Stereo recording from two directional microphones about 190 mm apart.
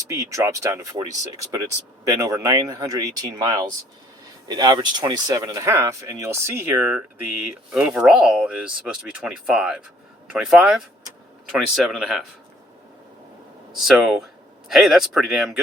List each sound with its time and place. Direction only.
0.1 s speech: 15° right (ahead or behind)
2.2 s a man's voice: 15° right (ahead or behind); by 12.2 s centre (ahead or behind)
13.7 s a man's voice: centre (ahead or behind)